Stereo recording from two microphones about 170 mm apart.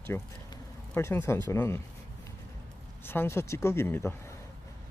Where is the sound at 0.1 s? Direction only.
15° left (ahead or behind).